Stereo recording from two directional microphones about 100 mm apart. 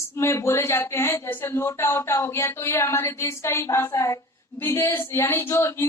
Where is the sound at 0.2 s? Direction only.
30° left (ahead or behind).